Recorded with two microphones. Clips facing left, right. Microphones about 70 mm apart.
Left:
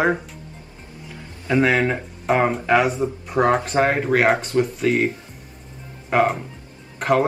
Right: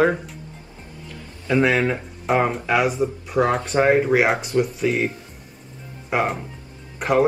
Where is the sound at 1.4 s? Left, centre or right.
Centre.